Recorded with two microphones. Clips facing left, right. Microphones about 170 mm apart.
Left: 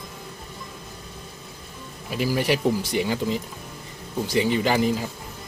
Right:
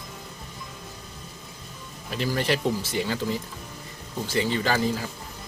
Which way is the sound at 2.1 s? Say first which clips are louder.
Left 3 dB; 10° left (ahead or behind).